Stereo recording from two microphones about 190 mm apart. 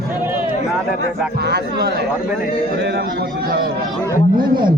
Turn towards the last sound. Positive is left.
turn(degrees=-25)  # may be behind; listen again after turning